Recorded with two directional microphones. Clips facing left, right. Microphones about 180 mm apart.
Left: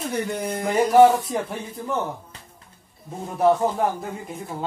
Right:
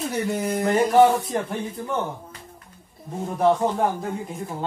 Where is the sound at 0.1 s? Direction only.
5° right (ahead or behind).